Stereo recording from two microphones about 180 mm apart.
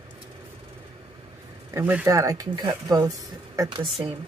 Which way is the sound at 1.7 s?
10° right (ahead or behind).